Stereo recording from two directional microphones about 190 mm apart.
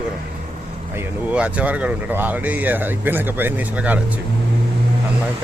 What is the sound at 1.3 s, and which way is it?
Speech, 5° right (ahead or behind).